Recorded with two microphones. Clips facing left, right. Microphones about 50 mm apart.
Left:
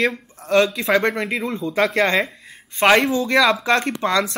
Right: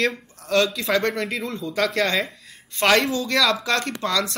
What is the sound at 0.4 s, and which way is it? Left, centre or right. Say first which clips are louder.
Speech: left 4 dB; left.